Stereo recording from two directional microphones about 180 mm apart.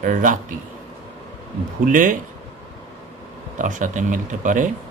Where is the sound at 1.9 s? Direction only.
45° right (ahead or behind).